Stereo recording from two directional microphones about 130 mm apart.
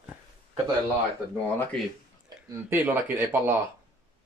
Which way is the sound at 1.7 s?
5° left (ahead or behind).